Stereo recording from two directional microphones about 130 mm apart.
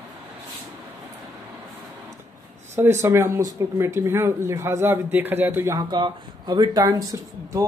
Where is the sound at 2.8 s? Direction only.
20° right (ahead or behind).